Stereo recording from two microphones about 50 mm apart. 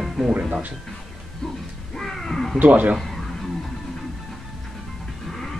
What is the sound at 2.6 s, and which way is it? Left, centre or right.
Speech, right.